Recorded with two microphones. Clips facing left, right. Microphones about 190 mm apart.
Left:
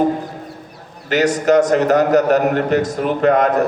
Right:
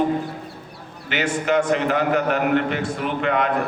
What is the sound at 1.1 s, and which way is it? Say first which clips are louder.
A man's voice: left 7 dB; 40° left (ahead or behind).